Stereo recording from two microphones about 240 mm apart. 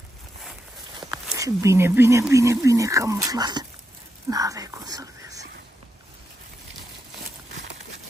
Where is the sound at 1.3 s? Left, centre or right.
Centre.